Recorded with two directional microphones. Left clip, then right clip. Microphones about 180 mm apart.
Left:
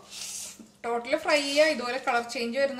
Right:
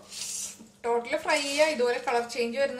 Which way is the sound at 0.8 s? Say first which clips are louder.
Even; 30° left (ahead or behind).